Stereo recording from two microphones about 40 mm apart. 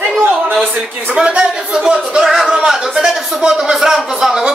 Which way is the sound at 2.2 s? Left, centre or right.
Centre.